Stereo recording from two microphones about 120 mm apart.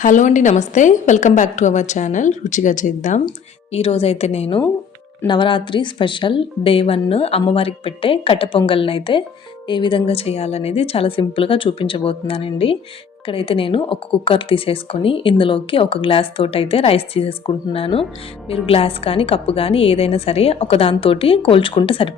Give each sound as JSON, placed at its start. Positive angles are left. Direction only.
{"t": 0.0, "sound": "a woman's voice", "side_deg": 90}
{"t": 3.7, "sound": "a woman's voice", "side_deg": 55}
{"t": 5.2, "sound": "speech", "side_deg": 40}